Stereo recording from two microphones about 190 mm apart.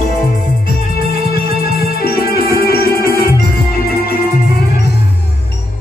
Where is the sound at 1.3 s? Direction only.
50° left (ahead or behind).